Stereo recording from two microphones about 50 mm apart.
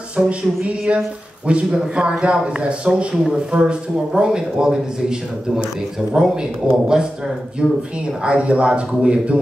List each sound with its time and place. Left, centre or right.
0.2 s speech: centre
1.5 s a man's voice: right
6.2 s speech: centre
7.6 s speech: centre
8.2 s a man's voice: right